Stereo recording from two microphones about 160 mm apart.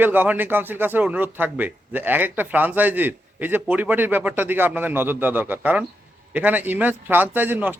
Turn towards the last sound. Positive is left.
turn(degrees=-10)  # may be behind; listen again after turning